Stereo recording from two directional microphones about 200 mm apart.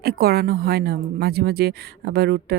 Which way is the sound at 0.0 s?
50° right (ahead or behind).